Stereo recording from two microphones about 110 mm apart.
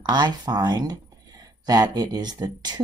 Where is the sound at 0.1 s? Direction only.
40° right (ahead or behind).